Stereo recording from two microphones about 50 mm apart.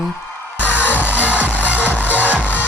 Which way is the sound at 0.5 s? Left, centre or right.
Left.